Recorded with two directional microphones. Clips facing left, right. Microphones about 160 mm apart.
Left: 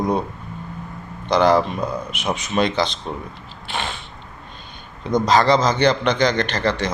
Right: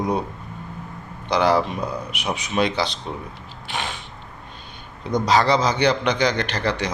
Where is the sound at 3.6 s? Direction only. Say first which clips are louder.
Left 2 dB; 10° right (ahead or behind).